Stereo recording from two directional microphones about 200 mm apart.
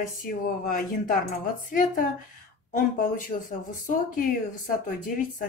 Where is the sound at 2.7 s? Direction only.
40° left (ahead or behind).